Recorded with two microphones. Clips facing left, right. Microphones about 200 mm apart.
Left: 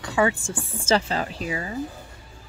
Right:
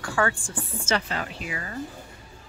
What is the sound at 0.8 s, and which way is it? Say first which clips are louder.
Speech: left 6 dB; 30° left (ahead or behind).